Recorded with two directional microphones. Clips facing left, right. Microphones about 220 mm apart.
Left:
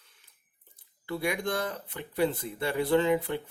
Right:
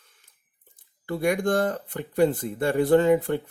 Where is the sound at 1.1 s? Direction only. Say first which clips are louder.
Right 7 dB; 50° right (ahead or behind).